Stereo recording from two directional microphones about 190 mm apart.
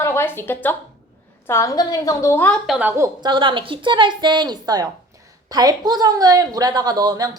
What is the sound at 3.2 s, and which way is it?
A woman's voice, 25° right (ahead or behind).